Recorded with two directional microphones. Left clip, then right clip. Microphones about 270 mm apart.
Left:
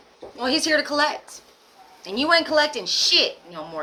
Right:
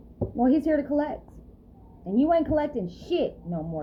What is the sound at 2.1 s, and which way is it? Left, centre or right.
Speech, centre.